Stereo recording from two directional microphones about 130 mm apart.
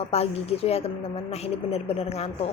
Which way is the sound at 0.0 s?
50° left (ahead or behind).